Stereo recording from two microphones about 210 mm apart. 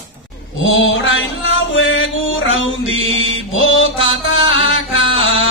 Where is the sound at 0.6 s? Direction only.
65° left (ahead or behind).